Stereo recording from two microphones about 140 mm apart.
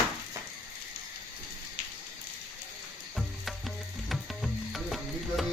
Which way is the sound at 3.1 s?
Centre (ahead or behind).